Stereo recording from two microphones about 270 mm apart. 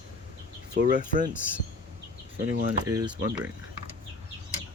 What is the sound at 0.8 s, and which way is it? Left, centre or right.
Speech, left.